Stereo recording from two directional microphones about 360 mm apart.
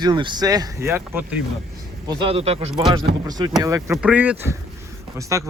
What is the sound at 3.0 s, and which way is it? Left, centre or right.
Speech, centre.